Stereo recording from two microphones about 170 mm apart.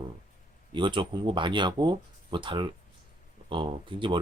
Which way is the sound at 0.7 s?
30° right (ahead or behind).